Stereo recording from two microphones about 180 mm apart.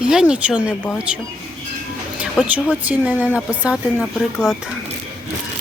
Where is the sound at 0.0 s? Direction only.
5° right (ahead or behind).